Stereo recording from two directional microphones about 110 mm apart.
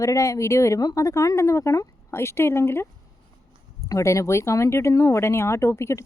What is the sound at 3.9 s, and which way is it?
Speech, 30° left (ahead or behind).